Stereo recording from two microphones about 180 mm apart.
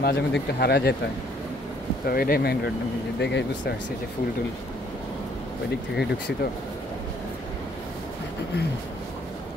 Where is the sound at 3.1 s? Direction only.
70° left (ahead or behind).